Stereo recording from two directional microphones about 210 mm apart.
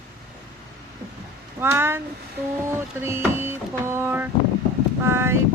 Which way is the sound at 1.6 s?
10° right (ahead or behind).